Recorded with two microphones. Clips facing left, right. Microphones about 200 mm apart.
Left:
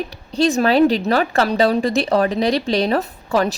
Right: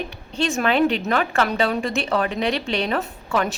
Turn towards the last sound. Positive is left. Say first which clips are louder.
# left 4 dB
turn(degrees=35)  # may be behind; listen again after turning